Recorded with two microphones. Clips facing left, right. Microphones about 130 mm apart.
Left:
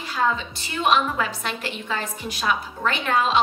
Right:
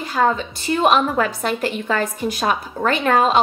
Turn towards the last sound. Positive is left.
turn(degrees=-45)  # may be behind; listen again after turning